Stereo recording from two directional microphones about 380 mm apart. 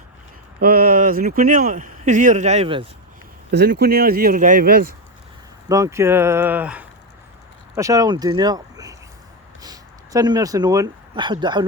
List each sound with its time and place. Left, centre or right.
0.6 s speech: right
3.5 s speech: right
5.6 s speech: centre